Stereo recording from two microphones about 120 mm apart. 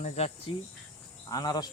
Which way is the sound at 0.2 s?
60° left (ahead or behind).